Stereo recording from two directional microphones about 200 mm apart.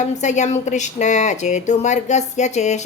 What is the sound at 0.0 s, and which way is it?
A woman's voice, 35° left (ahead or behind).